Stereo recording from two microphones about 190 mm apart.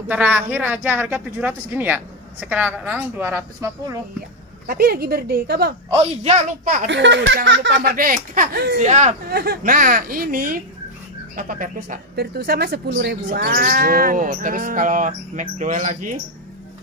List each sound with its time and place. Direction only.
0.1 s a man's voice: 10° right (ahead or behind)
4.6 s speech: 55° right (ahead or behind)
5.9 s a woman's voice: 30° right (ahead or behind)
6.9 s speech: 70° right (ahead or behind); by 8.7 s 50° right (ahead or behind)
8.8 s a woman's voice: 40° right (ahead or behind)
9.3 s speech: 55° right (ahead or behind)